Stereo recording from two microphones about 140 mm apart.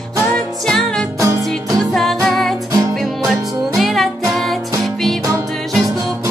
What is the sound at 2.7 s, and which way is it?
Music, 25° right (ahead or behind).